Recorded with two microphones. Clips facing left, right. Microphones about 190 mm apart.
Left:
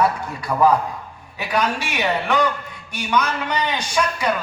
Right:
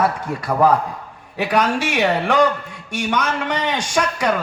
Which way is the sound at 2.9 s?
90° right.